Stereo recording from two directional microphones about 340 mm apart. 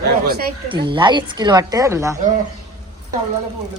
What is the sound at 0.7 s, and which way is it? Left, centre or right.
Speech, centre.